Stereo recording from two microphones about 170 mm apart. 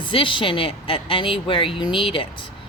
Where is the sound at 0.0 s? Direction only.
30° left (ahead or behind).